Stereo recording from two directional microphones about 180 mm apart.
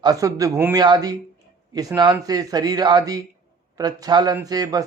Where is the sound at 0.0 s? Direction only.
20° right (ahead or behind).